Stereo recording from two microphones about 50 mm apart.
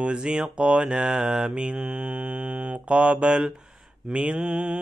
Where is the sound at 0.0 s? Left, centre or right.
Centre.